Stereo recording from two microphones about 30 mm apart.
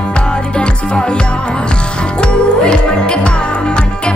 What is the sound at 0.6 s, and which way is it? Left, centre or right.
Music, left.